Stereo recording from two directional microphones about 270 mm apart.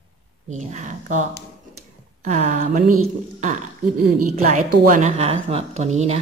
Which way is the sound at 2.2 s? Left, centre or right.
Right.